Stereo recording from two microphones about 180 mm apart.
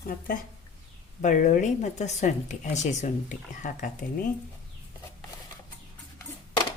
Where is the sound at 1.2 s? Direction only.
45° left (ahead or behind).